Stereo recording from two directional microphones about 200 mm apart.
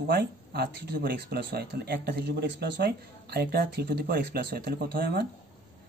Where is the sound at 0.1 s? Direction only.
50° right (ahead or behind).